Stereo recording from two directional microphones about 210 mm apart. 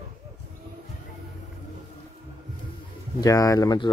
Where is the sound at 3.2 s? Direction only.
15° left (ahead or behind).